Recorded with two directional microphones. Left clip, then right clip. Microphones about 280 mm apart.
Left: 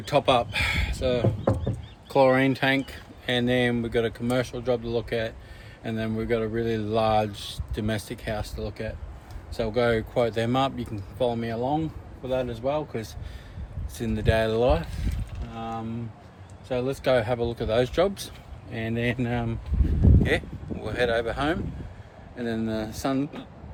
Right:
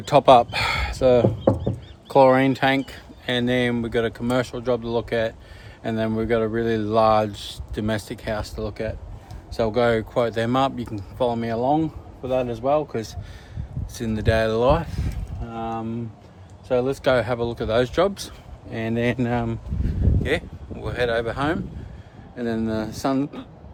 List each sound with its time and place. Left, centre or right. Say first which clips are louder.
0.0 s speech: right 8 dB; centre
2.0 s speech: right 5 dB; centre
20.2 s a sound: right 2 dB; centre
22.4 s speech: right 4 dB; centre